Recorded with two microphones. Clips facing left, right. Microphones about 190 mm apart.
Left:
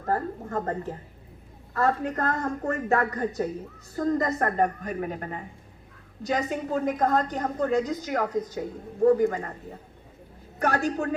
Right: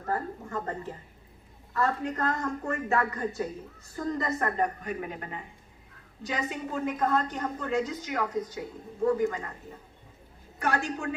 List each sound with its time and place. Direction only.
0.0 s a woman's voice: 45° left (ahead or behind)
10.6 s a woman's voice: 40° left (ahead or behind)